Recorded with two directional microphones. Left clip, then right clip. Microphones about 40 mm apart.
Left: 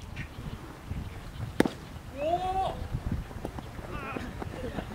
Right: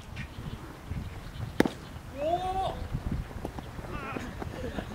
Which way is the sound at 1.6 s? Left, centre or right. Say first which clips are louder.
Even; centre.